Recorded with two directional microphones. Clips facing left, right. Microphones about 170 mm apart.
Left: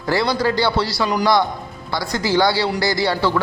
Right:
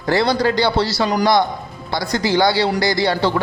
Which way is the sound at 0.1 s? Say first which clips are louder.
Right 2 dB; 25° right (ahead or behind).